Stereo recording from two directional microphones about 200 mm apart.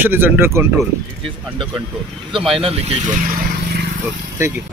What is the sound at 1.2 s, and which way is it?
Speech, 25° right (ahead or behind).